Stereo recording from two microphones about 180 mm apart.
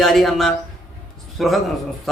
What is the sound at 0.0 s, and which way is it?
A man's voice, centre (ahead or behind).